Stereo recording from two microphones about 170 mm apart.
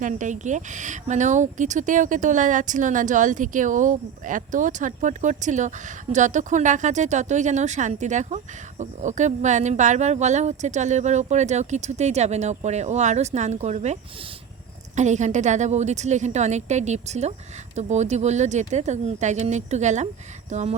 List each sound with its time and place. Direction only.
0.0 s speech: 45° right (ahead or behind)